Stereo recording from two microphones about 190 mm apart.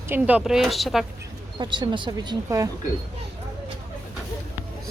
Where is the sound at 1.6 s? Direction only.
25° right (ahead or behind).